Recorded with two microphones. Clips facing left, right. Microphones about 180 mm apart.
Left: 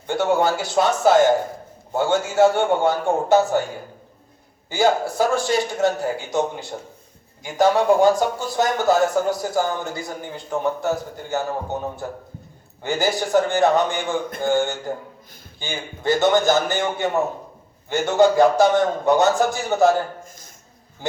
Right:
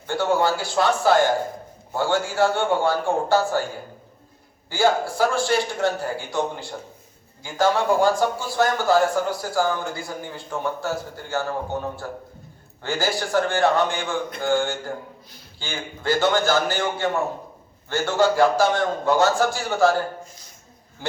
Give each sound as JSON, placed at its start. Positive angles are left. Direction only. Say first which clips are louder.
{"t": 0.1, "sound": "a man's voice", "louder": "left 2 dB", "side_deg": 20}
{"t": 4.7, "sound": "a man's voice", "louder": "left 1 dB", "side_deg": 20}